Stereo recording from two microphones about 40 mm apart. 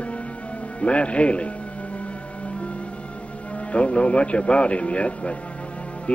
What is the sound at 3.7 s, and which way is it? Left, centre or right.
Speech, left.